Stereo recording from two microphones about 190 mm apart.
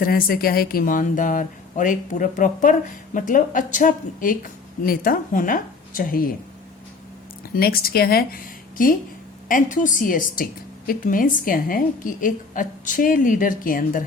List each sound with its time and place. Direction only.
0.0 s a woman's voice: 50° left (ahead or behind)
7.4 s a woman's voice: 50° left (ahead or behind)
9.5 s a woman's voice: 45° left (ahead or behind)